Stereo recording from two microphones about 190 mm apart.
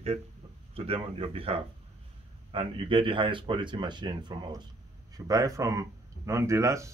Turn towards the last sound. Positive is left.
turn(degrees=-15)  # may be behind; listen again after turning